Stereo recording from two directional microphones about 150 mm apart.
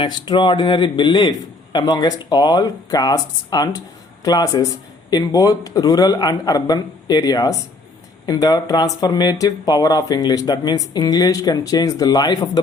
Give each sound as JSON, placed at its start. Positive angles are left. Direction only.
{"t": 0.0, "sound": "speech", "side_deg": 30}